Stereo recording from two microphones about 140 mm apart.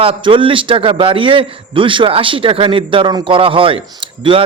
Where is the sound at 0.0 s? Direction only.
40° right (ahead or behind).